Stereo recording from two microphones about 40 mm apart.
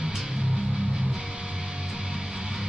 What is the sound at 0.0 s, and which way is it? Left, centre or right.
Music, centre.